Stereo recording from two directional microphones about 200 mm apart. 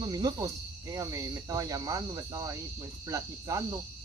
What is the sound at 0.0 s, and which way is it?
Speech, 20° right (ahead or behind).